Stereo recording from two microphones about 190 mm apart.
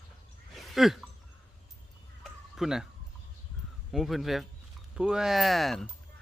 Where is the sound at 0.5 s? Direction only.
Centre (ahead or behind).